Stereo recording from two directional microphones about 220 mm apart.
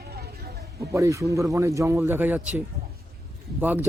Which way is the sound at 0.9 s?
15° right (ahead or behind).